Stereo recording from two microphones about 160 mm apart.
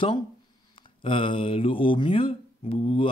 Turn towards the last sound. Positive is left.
turn(degrees=35)  # may be behind; listen again after turning